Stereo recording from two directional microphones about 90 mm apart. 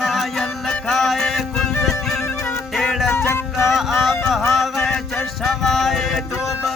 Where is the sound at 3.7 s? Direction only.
Centre (ahead or behind).